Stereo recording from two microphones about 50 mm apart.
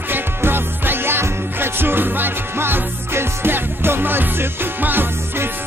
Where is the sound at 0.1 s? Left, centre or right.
Right.